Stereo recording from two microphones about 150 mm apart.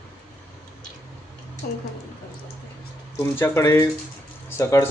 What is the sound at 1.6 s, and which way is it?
Speech, 80° left.